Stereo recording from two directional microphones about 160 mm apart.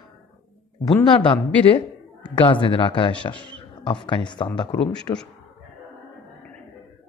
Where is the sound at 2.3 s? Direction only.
30° left (ahead or behind).